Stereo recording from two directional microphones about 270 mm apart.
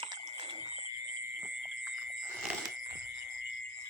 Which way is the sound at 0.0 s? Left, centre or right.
Centre.